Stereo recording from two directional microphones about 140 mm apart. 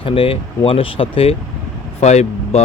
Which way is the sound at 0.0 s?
40° left (ahead or behind).